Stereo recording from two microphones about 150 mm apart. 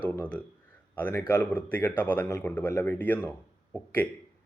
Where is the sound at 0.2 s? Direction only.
10° left (ahead or behind).